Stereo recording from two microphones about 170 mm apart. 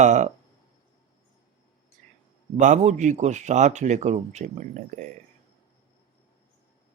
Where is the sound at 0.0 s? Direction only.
45° right (ahead or behind).